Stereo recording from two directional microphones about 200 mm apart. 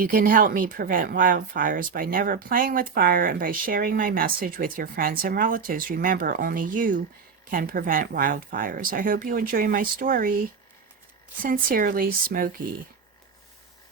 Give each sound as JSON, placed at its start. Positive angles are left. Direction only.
{"t": 0.0, "sound": "speech", "side_deg": -45}
{"t": 11.4, "sound": "speech", "side_deg": -45}